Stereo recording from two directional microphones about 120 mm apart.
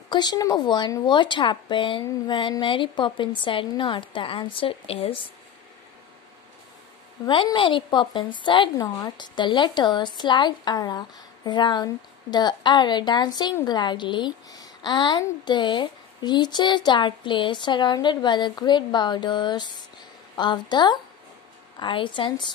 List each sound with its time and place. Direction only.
0.1 s a woman's voice: 35° left (ahead or behind); by 5.2 s 50° left (ahead or behind)
7.2 s a woman's voice: 45° left (ahead or behind)
8.7 s a woman's voice: 30° left (ahead or behind)